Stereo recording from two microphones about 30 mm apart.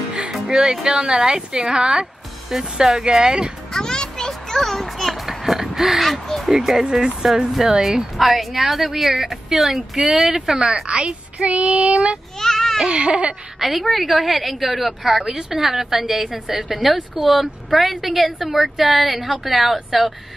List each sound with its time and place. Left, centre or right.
0.5 s speech: right
1.8 s baby cry: right
2.5 s speech: centre
3.7 s music: left
4.3 s a sound: centre
4.8 s a sound: centre
6.0 s crow: centre
6.5 s speech: centre
8.2 s a woman's voice: centre
10.7 s a woman's voice: right
11.4 s child singing: right
12.4 s a sound: centre
12.8 s baby cry: right
13.6 s a woman's voice: centre